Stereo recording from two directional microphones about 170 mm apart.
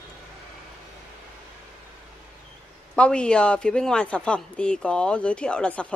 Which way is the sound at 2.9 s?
5° left (ahead or behind).